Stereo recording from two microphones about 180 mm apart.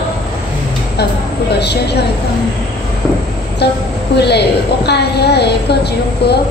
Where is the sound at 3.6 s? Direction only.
65° left (ahead or behind).